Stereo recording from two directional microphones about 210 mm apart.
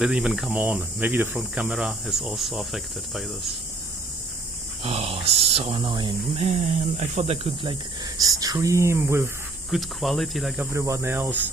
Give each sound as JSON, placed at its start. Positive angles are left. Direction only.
{"t": 0.0, "sound": "speech", "side_deg": 0}
{"t": 4.8, "sound": "speech", "side_deg": -30}
{"t": 9.6, "sound": "speech", "side_deg": 0}
{"t": 10.7, "sound": "speech", "side_deg": -15}